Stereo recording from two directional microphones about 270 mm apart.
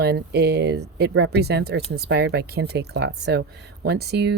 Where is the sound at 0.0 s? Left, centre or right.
Right.